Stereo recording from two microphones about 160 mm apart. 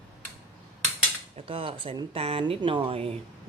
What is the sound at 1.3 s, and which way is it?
Speech, 35° right (ahead or behind).